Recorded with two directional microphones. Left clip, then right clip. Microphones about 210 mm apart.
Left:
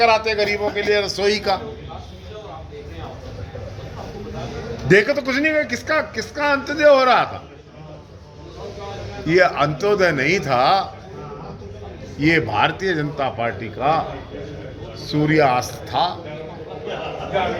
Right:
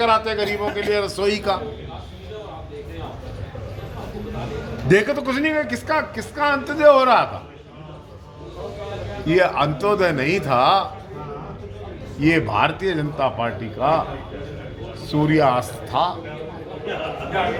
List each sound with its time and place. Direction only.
0.0 s a man's voice: 15° right (ahead or behind)
4.9 s a man's voice: 10° right (ahead or behind)
9.2 s a man's voice: 15° right (ahead or behind)
12.2 s a man's voice: 10° right (ahead or behind)
15.0 s a man's voice: 10° right (ahead or behind)